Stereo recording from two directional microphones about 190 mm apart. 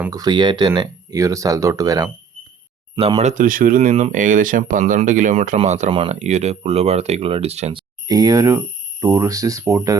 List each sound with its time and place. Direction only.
0.1 s speech: 20° right (ahead or behind)
3.2 s speech: 40° right (ahead or behind); by 10.0 s 15° right (ahead or behind)